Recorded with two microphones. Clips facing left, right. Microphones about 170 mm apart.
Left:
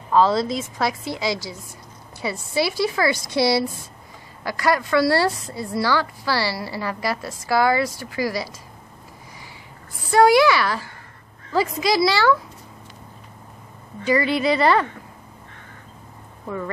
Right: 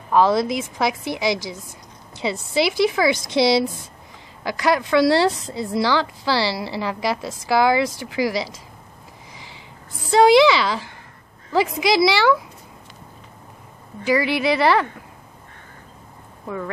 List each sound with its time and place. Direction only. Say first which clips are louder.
0.1 s a woman's voice: right 1 dB; 15° right (ahead or behind)
10.1 s a woman's voice: right 2 dB; 20° right (ahead or behind)
14.0 s a woman's voice: even; 10° right (ahead or behind)
16.4 s speech: even; centre (ahead or behind)